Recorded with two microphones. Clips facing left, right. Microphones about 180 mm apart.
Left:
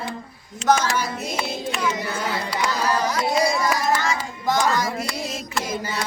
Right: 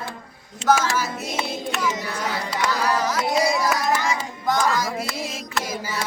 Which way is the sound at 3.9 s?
15° right (ahead or behind).